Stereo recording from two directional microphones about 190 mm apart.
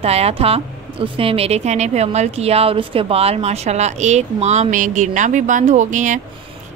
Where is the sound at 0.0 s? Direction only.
35° right (ahead or behind).